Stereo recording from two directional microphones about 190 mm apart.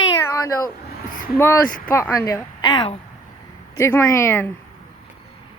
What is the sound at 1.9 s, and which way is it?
A woman's voice, 10° left (ahead or behind).